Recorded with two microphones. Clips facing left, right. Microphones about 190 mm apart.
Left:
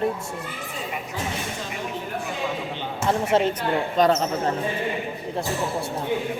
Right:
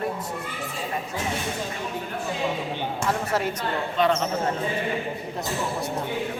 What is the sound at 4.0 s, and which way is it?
Speech, 40° left (ahead or behind).